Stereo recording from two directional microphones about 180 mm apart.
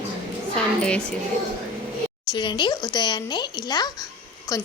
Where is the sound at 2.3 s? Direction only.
25° left (ahead or behind).